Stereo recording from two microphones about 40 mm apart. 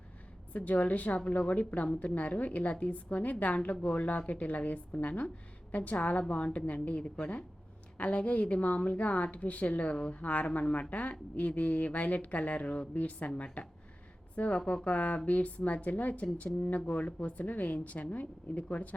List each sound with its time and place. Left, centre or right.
0.5 s speech: left